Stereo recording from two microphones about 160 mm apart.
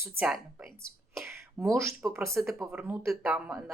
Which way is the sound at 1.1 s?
15° right (ahead or behind).